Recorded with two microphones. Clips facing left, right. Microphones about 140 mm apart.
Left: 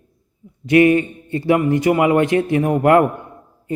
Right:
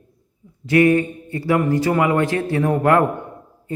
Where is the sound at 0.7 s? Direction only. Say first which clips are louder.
Left 2 dB; 20° left (ahead or behind).